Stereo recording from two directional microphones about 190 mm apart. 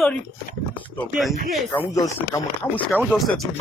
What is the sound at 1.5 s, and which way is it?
Speech, 5° left (ahead or behind).